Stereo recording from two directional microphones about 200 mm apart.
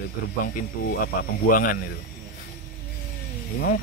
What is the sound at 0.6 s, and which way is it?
Speech, 45° left (ahead or behind).